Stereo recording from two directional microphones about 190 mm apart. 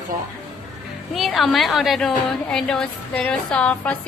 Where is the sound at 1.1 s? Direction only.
Centre (ahead or behind).